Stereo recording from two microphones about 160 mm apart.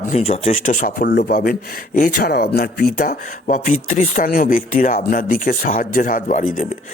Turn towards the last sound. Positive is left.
turn(degrees=55)  # may be behind; listen again after turning